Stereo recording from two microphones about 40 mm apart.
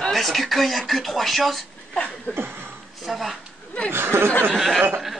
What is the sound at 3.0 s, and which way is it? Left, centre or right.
Speech, centre.